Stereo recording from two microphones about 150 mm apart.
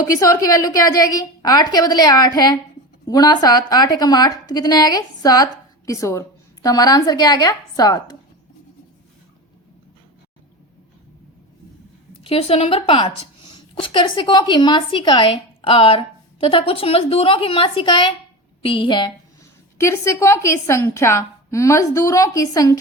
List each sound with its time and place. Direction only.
0.1 s a woman's voice: 25° left (ahead or behind)
12.2 s speech: 40° left (ahead or behind)
19.8 s a woman's voice: 20° left (ahead or behind)